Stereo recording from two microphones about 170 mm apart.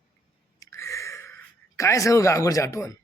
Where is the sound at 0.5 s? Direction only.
15° left (ahead or behind).